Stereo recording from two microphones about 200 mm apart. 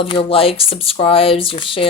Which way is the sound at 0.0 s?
25° left (ahead or behind).